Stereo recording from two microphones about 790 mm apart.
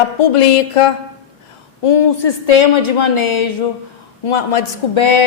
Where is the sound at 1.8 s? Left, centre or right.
Left.